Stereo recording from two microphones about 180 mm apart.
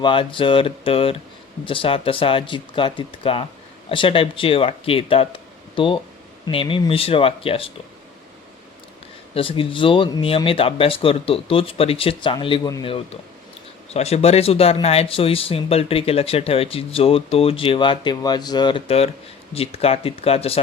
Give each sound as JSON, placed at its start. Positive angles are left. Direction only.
{"t": 0.0, "sound": "speech", "side_deg": 30}
{"t": 9.3, "sound": "speech", "side_deg": 30}
{"t": 13.9, "sound": "speech", "side_deg": 35}